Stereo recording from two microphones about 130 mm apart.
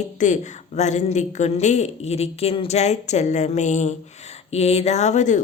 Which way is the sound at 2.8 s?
60° left (ahead or behind).